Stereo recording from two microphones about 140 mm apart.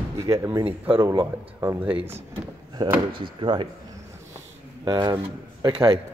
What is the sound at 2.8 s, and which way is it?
Speech, 30° right (ahead or behind).